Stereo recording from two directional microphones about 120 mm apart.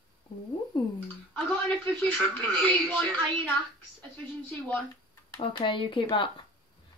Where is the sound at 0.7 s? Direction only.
40° left (ahead or behind).